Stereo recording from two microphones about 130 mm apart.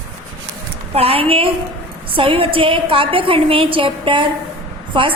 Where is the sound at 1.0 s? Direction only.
50° right (ahead or behind).